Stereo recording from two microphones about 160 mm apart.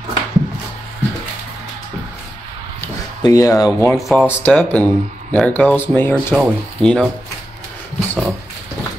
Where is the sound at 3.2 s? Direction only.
20° left (ahead or behind).